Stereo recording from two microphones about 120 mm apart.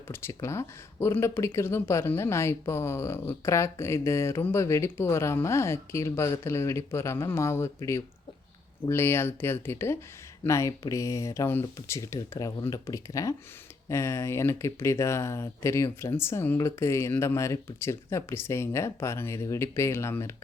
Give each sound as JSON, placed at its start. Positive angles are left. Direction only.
{"t": 0.1, "sound": "speech", "side_deg": 20}